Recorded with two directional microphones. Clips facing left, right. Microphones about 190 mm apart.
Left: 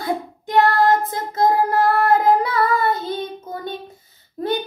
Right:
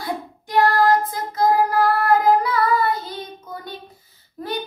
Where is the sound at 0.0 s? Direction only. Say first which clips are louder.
Left 4 dB; 25° left (ahead or behind).